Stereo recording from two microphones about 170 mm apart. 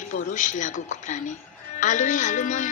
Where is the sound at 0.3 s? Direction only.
50° left (ahead or behind).